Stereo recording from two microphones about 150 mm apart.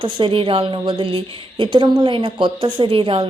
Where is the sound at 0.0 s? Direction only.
35° right (ahead or behind).